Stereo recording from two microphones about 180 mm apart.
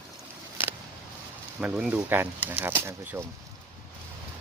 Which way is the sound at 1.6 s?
5° right (ahead or behind).